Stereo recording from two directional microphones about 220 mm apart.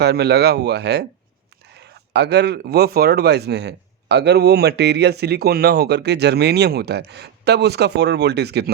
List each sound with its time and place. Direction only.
0.0 s speech: 50° right (ahead or behind)